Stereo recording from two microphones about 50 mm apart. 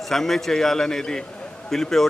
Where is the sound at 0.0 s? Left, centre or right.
Centre.